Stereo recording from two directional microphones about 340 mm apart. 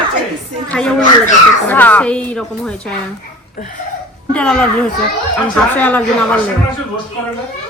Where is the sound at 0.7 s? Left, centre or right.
Centre.